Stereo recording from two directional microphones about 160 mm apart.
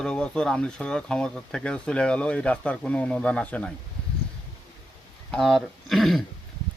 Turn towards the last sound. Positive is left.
turn(degrees=0)  # may be behind; listen again after turning